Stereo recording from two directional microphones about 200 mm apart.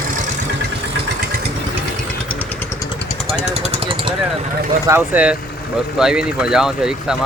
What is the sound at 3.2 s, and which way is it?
Jackhammer, 35° right (ahead or behind).